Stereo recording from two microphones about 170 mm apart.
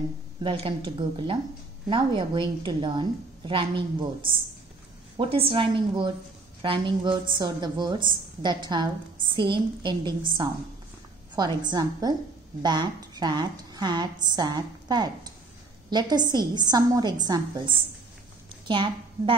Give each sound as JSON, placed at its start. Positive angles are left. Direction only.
{"t": 0.4, "sound": "a woman's voice", "side_deg": -30}